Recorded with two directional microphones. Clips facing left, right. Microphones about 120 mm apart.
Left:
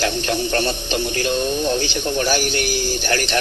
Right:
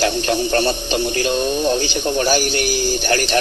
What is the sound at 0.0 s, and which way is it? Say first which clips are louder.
Speech: right 3 dB; 30° right (ahead or behind).